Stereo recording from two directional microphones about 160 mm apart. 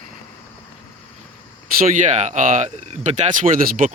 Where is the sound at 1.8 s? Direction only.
50° right (ahead or behind).